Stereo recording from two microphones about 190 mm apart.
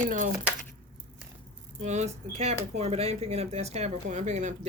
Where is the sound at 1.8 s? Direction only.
35° right (ahead or behind).